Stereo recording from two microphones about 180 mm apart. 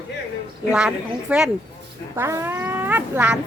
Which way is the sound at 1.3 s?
5° right (ahead or behind).